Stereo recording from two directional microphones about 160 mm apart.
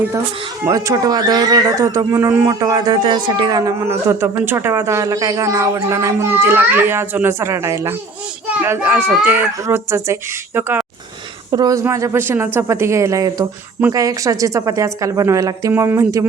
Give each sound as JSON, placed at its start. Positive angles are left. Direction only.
{"t": 0.6, "sound": "speech", "side_deg": -20}